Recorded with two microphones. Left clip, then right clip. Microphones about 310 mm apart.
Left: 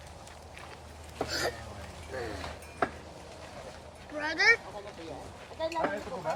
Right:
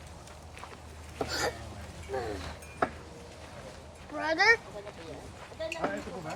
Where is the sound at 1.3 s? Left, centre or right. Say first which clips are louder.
Even; centre.